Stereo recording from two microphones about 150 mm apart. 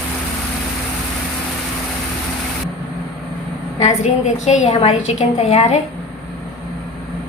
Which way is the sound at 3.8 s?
50° left (ahead or behind).